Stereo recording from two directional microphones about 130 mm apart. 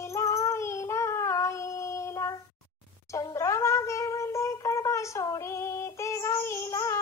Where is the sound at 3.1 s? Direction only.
25° left (ahead or behind).